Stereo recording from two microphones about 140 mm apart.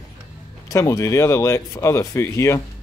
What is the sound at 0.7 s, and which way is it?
Speech, 25° left (ahead or behind).